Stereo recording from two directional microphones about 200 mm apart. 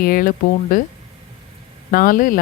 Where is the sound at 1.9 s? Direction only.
45° left (ahead or behind).